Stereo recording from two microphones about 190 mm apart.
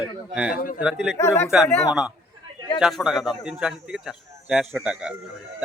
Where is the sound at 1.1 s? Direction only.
15° left (ahead or behind).